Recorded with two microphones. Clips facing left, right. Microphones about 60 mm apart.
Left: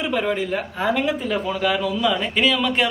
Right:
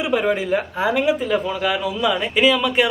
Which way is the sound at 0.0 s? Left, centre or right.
Centre.